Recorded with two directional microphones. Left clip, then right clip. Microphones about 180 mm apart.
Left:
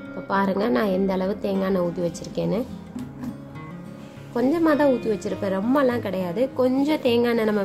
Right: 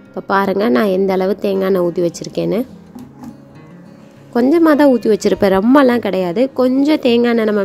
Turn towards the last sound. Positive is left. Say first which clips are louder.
# right 7 dB
turn(degrees=-35)  # may be behind; listen again after turning